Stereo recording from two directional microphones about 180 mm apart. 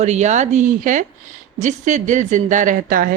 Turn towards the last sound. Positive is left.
turn(degrees=-50)  # may be behind; listen again after turning